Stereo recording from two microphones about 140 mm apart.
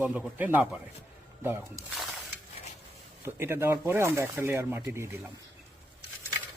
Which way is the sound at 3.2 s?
20° right (ahead or behind).